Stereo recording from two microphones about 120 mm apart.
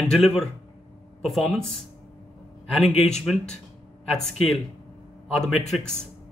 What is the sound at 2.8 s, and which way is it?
Speech, 60° left (ahead or behind).